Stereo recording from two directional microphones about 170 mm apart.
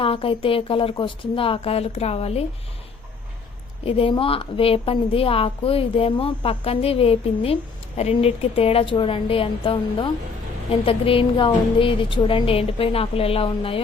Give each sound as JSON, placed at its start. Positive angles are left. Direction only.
{"t": 0.0, "sound": "a woman's voice", "side_deg": 30}
{"t": 3.8, "sound": "a woman's voice", "side_deg": 35}